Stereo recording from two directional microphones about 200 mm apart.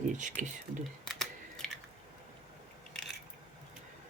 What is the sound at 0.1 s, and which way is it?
Speech, 40° right (ahead or behind).